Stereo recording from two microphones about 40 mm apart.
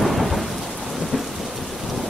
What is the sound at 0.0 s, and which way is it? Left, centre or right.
Thunder, centre.